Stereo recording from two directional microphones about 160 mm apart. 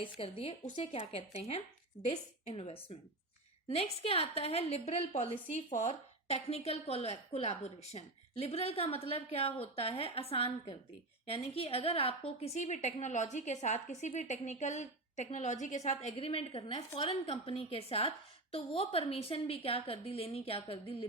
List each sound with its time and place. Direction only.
0.0 s a woman's voice: 35° left (ahead or behind)